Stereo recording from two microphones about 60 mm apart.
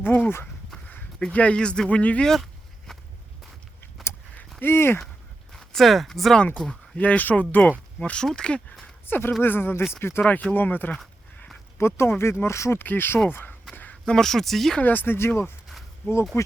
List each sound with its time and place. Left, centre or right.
0.0 s a sound: left
1.3 s speech: left
2.2 s a sound: centre
4.6 s speech: left
5.5 s speech: centre
6.7 s speech: centre
7.9 s speech: centre
9.0 s speech: left
10.5 s speech: left
11.8 s speech: left
12.8 s speech: left
14.0 s speech: centre
14.8 s speech: left
16.3 s speech: left